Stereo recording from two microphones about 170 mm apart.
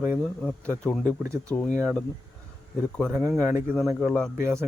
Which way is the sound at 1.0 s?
15° right (ahead or behind).